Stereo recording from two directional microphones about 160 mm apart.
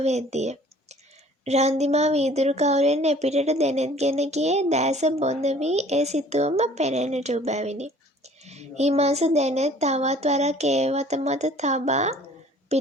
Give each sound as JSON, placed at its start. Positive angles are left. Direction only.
{"t": 0.0, "sound": "speech", "side_deg": -45}